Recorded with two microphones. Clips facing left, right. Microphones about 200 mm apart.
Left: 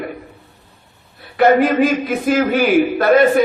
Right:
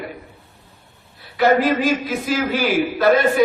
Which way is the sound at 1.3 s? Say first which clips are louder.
Left 4 dB; 55° left (ahead or behind).